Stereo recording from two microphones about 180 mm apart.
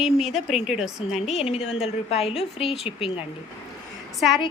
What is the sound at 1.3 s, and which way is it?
A woman's voice, 35° left (ahead or behind).